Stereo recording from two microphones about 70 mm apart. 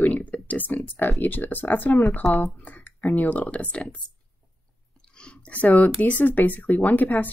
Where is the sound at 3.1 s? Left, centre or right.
Left.